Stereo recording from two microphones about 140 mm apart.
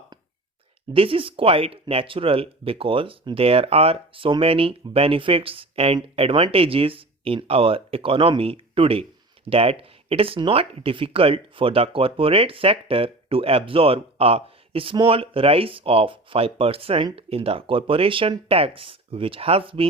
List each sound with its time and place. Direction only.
0.9 s speech: 40° right (ahead or behind)